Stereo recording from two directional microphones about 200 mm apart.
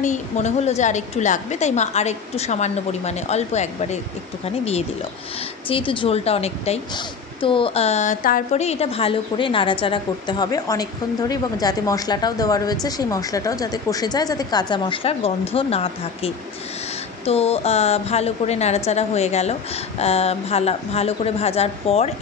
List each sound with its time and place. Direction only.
0.0 s a woman's voice: 35° left (ahead or behind)